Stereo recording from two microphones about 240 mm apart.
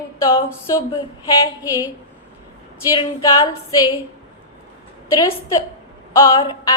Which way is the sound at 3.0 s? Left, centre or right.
Centre.